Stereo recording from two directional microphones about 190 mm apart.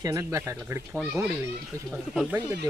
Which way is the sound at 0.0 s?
15° right (ahead or behind).